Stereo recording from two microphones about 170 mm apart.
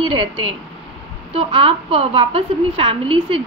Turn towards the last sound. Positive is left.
turn(degrees=-30)  # may be behind; listen again after turning